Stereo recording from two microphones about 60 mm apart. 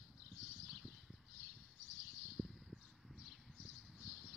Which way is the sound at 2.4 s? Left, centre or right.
Right.